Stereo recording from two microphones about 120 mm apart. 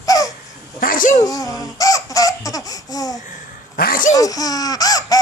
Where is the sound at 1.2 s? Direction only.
30° left (ahead or behind).